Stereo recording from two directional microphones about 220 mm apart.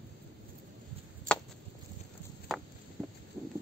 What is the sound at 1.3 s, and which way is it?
Chop, 35° right (ahead or behind).